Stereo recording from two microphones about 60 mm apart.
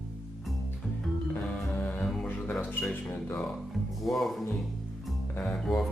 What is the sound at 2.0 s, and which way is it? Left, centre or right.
Music, centre.